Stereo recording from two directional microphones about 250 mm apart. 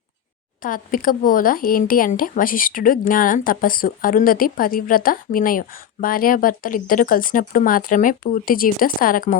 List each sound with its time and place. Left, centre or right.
0.6 s speech: left